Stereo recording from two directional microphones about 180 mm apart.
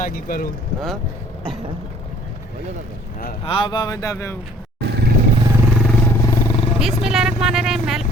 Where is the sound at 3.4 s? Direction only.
30° left (ahead or behind).